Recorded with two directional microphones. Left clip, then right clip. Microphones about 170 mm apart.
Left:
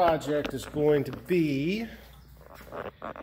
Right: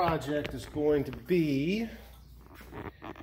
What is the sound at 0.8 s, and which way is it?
Speech, 30° left (ahead or behind).